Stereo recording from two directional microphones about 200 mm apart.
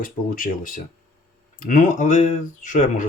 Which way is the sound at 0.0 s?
45° left (ahead or behind).